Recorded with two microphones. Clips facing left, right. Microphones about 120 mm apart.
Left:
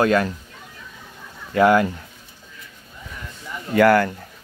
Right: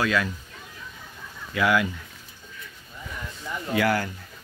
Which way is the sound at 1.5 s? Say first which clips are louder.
Left 7 dB; 45° left (ahead or behind).